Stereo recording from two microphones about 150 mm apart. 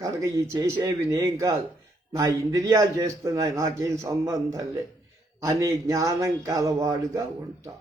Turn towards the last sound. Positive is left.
turn(degrees=-20)  # may be behind; listen again after turning